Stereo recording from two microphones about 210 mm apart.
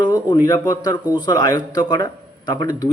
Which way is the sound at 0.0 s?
20° left (ahead or behind).